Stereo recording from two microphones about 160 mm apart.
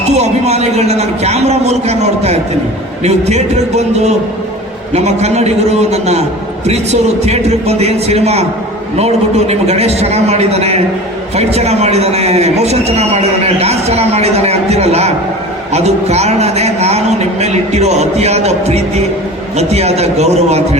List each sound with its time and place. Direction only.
0.1 s a man's voice: 45° right (ahead or behind)